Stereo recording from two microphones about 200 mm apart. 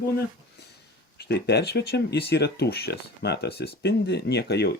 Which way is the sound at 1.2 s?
55° left (ahead or behind).